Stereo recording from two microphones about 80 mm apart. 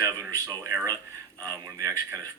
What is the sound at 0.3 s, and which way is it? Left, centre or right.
A man's voice, right.